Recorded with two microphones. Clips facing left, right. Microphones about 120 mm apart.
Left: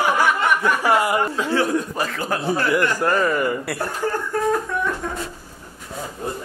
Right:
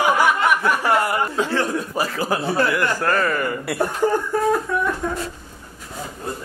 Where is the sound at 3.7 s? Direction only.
15° right (ahead or behind).